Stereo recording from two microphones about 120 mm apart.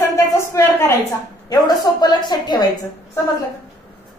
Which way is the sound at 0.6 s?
20° left (ahead or behind).